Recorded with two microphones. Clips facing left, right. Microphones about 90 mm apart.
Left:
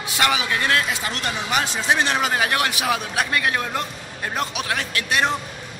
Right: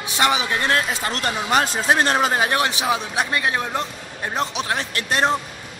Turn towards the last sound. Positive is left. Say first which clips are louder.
# right 1 dB
turn(degrees=-35)  # may be behind; listen again after turning